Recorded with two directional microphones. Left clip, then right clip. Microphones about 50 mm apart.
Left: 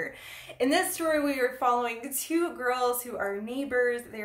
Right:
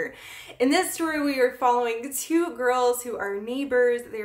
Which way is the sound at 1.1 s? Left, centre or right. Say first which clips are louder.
Right 2 dB; right.